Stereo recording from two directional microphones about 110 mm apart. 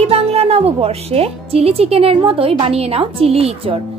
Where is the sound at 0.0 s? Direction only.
65° right (ahead or behind).